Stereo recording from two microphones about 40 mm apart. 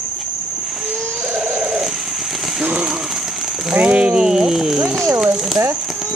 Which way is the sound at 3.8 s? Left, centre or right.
Right.